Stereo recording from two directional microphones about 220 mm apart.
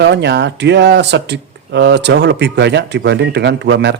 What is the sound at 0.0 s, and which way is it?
Speech, 50° right (ahead or behind).